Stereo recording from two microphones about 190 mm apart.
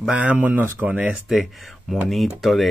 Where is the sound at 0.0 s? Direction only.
5° right (ahead or behind).